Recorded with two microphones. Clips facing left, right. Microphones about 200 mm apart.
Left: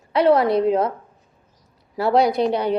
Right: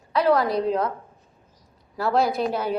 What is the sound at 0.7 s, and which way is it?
Speech, 25° left (ahead or behind).